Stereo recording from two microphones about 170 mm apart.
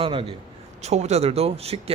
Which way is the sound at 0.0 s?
30° right (ahead or behind).